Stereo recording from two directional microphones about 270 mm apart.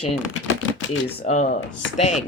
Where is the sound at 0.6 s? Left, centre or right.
Left.